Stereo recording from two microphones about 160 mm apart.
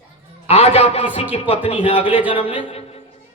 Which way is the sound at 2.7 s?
40° left (ahead or behind).